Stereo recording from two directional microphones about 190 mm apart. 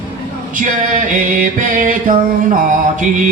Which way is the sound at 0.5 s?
45° right (ahead or behind).